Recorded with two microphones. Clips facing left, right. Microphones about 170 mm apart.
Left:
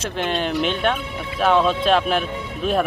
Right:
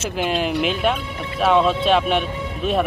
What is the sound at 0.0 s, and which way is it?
Speech, 5° right (ahead or behind).